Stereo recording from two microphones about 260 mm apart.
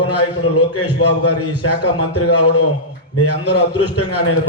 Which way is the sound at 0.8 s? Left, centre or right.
Left.